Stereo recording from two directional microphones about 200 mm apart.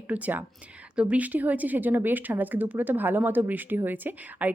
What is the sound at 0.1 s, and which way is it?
Speech, 10° right (ahead or behind).